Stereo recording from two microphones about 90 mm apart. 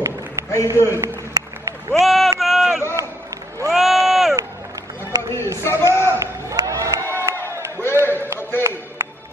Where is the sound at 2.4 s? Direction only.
5° right (ahead or behind).